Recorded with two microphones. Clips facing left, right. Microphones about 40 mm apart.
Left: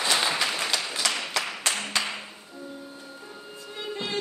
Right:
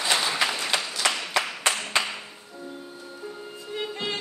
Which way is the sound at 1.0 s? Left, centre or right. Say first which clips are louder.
Right 3 dB; right.